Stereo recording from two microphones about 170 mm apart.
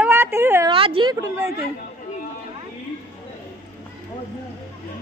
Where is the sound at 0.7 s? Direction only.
30° right (ahead or behind).